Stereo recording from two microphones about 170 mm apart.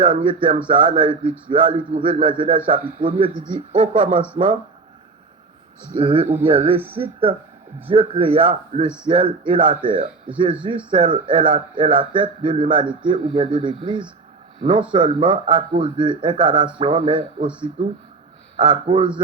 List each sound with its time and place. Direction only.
0.0 s a man's voice: 30° right (ahead or behind)
5.9 s a man's voice: 30° right (ahead or behind)
18.5 s a man's voice: 30° right (ahead or behind)